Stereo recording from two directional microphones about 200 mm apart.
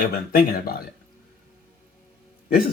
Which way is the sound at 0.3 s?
50° left (ahead or behind).